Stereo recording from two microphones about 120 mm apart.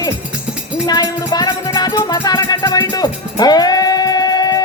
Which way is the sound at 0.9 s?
35° left (ahead or behind).